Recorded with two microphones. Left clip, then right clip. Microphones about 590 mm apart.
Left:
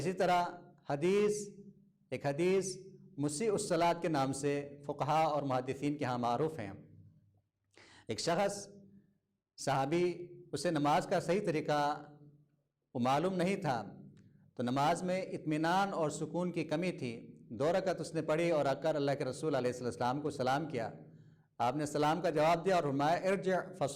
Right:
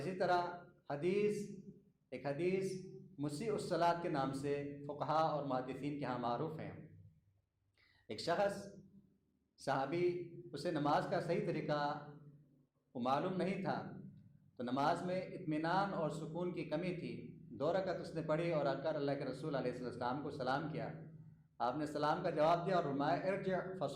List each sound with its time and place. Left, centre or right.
0.0 s a man's voice: left
7.8 s a woman's voice: left